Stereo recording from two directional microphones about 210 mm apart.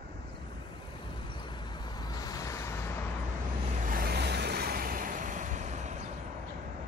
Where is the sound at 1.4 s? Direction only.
20° left (ahead or behind).